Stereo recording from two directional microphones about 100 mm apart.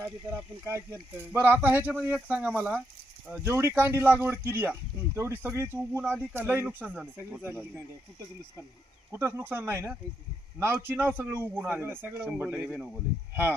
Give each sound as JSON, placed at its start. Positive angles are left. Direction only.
{"t": 0.0, "sound": "speech", "side_deg": -25}
{"t": 3.4, "sound": "speech", "side_deg": -25}
{"t": 9.1, "sound": "speech", "side_deg": -25}